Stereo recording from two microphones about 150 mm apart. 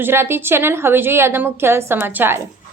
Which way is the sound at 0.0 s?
15° right (ahead or behind).